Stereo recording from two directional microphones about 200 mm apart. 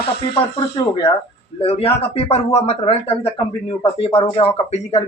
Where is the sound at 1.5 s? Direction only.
30° left (ahead or behind).